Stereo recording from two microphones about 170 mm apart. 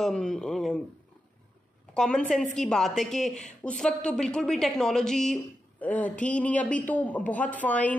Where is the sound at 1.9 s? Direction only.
5° left (ahead or behind).